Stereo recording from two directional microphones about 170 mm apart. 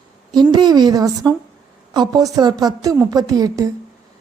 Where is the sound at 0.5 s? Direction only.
25° right (ahead or behind).